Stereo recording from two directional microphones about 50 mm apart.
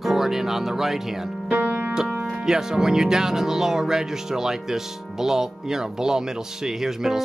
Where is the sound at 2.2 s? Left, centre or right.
Centre.